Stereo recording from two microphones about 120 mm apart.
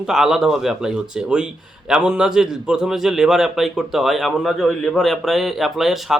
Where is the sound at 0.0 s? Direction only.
5° right (ahead or behind).